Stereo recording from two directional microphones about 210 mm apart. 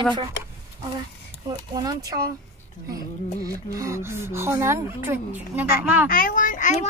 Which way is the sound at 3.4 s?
15° right (ahead or behind).